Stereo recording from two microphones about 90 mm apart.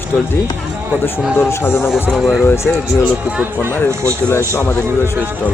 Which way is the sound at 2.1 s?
Centre (ahead or behind).